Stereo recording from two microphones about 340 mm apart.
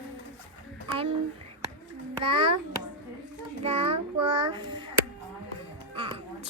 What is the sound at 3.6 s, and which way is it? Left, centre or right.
A child's voice, centre.